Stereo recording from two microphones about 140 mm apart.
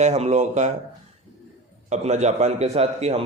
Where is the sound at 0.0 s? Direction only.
50° right (ahead or behind).